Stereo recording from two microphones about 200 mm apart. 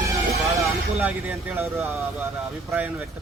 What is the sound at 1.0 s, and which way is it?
Speech, 10° right (ahead or behind).